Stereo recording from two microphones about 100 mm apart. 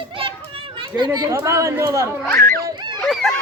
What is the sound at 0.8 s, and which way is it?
Speech, 50° right (ahead or behind).